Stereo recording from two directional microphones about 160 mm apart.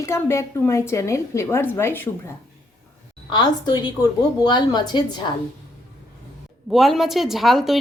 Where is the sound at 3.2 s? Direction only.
25° left (ahead or behind).